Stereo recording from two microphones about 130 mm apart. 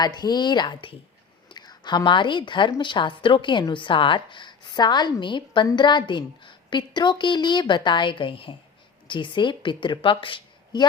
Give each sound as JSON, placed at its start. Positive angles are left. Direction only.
{"t": 0.0, "sound": "a woman's voice", "side_deg": 30}